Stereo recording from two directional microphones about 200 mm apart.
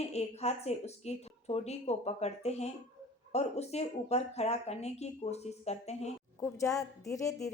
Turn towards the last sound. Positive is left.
turn(degrees=15)  # may be behind; listen again after turning